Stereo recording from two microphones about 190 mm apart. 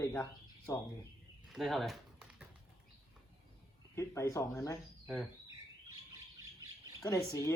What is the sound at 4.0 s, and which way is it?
Speech, 15° left (ahead or behind).